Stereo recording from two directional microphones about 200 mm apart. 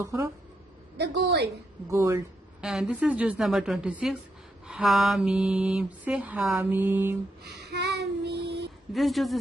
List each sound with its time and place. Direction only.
0.0 s speech: 15° right (ahead or behind)
0.9 s a woman's voice: 55° right (ahead or behind)
1.9 s speech: 15° right (ahead or behind)
2.6 s mantra: 5° right (ahead or behind)
7.6 s child singing: 60° right (ahead or behind)
8.9 s mantra: centre (ahead or behind)